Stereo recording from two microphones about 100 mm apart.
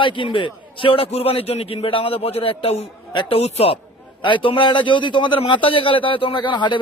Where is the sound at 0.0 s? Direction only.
55° left (ahead or behind); by 2.8 s 70° left (ahead or behind).